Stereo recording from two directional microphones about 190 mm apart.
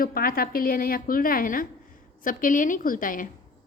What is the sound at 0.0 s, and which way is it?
A woman's voice, 50° left (ahead or behind).